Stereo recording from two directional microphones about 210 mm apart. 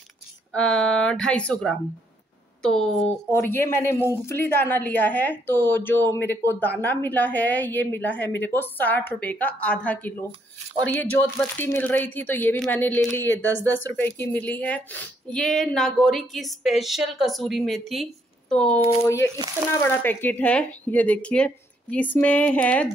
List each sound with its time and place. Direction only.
0.5 s a woman's voice: 5° left (ahead or behind)
13.6 s speech: 65° left (ahead or behind)
13.8 s a woman's voice: 10° left (ahead or behind)
18.8 s speech: 30° right (ahead or behind)
19.7 s a woman's voice: 10° left (ahead or behind)